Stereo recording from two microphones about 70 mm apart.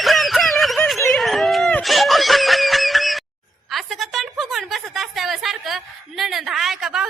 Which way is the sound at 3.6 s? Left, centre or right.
Centre.